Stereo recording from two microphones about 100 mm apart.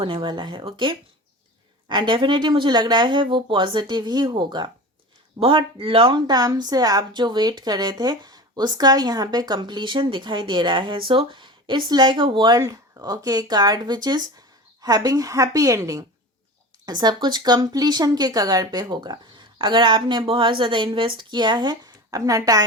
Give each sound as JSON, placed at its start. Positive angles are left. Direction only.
{"t": 0.0, "sound": "speech", "side_deg": -55}
{"t": 12.5, "sound": "speech", "side_deg": -35}
{"t": 16.8, "sound": "speech", "side_deg": -45}